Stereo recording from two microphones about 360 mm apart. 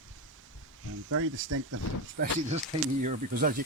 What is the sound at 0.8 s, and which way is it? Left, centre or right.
Speech, right.